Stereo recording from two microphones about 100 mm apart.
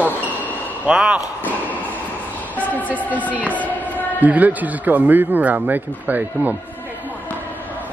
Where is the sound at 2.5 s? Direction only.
15° left (ahead or behind).